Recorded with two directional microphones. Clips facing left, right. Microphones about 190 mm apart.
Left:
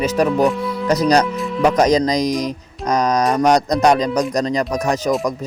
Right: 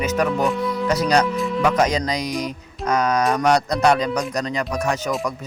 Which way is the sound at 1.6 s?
40° left (ahead or behind).